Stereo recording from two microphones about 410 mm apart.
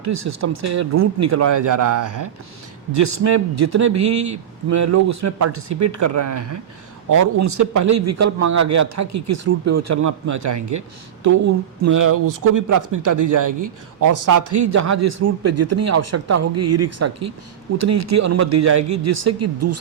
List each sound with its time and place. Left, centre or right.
0.0 s speech: right